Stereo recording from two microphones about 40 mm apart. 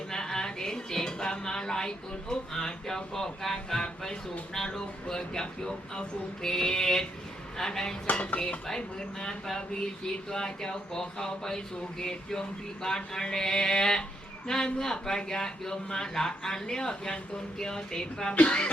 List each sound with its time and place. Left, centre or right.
0.1 s a sound: centre
2.3 s speech: centre
18.3 s speech: left